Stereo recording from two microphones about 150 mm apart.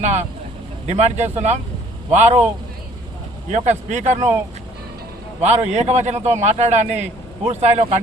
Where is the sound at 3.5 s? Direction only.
50° right (ahead or behind).